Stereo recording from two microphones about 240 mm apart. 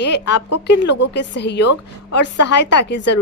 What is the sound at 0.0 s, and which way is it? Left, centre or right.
A woman's voice, left.